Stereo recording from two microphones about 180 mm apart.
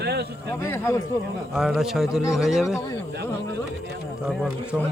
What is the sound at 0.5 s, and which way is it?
Speech, 15° left (ahead or behind).